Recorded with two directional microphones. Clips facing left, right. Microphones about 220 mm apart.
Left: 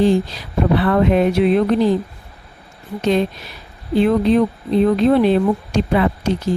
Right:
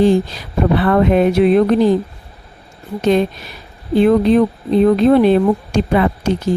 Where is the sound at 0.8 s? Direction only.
50° right (ahead or behind).